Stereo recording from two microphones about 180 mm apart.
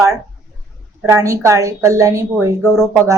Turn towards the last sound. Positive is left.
turn(degrees=-15)  # may be behind; listen again after turning